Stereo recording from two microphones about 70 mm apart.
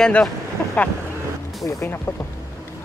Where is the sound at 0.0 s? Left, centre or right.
Centre.